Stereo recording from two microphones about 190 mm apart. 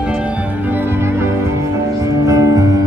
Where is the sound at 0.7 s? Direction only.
15° right (ahead or behind).